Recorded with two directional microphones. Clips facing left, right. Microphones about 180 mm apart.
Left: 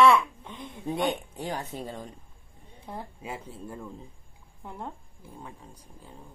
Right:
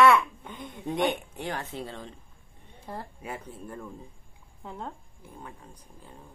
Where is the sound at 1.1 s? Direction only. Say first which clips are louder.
Left 1 dB; 15° left (ahead or behind).